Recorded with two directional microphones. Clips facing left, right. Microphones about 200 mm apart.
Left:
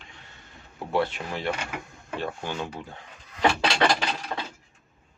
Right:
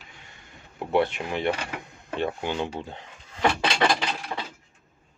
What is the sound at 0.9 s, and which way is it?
Speech, 20° right (ahead or behind).